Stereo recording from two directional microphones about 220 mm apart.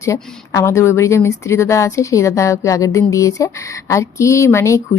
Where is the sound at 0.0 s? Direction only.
15° left (ahead or behind).